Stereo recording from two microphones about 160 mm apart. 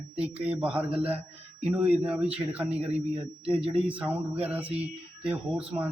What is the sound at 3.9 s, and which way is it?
A man's voice, 10° right (ahead or behind).